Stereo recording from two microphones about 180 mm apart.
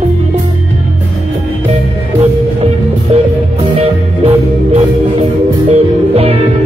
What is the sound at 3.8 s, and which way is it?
Music, 35° right (ahead or behind).